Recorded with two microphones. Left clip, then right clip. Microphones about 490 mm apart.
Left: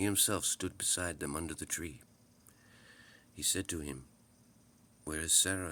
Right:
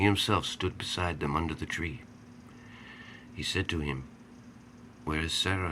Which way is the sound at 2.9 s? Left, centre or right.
Left.